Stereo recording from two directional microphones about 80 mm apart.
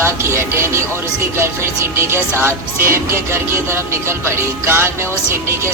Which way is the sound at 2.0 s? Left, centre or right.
Right.